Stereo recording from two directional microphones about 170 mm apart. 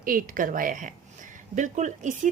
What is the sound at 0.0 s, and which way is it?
Speech, 55° right (ahead or behind).